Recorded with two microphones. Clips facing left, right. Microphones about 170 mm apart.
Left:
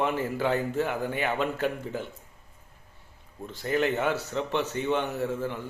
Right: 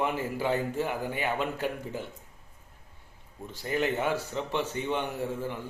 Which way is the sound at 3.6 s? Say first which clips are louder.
Left 3 dB; 45° left (ahead or behind).